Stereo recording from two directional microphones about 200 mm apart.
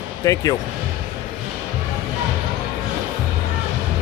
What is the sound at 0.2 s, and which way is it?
Speech, 15° left (ahead or behind).